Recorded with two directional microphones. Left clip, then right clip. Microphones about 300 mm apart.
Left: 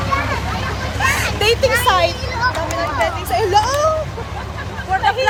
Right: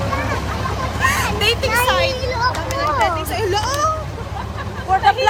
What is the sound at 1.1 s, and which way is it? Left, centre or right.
Vehicle, centre.